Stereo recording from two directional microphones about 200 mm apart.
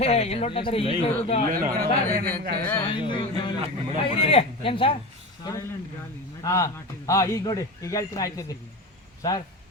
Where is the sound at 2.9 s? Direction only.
25° left (ahead or behind).